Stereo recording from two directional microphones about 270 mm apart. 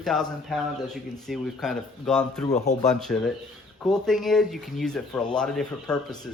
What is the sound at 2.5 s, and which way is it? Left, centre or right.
Speech, left.